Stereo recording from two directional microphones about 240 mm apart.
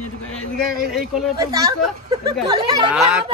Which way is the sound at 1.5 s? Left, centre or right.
Centre.